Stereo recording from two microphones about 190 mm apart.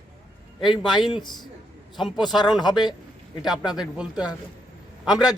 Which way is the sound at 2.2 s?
20° left (ahead or behind).